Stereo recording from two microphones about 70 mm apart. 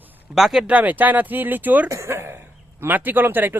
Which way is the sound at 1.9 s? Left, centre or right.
Right.